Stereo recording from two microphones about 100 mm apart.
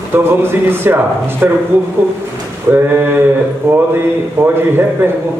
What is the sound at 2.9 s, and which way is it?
Speech, 20° right (ahead or behind).